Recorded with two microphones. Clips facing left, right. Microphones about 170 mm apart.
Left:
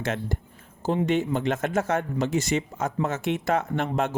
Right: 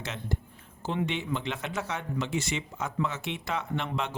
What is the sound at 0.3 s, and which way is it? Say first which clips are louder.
A man's voice: left 2 dB; 50° left (ahead or behind).